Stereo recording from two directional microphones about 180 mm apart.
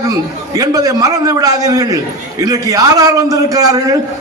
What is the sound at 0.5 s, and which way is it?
A man's voice, 20° right (ahead or behind).